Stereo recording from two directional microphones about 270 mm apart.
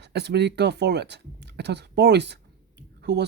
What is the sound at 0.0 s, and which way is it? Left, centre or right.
Speech, right.